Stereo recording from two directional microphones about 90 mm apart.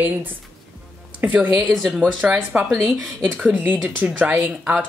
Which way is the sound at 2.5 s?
10° right (ahead or behind).